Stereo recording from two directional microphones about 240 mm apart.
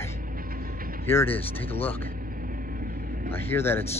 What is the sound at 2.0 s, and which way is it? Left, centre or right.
Vehicle, right.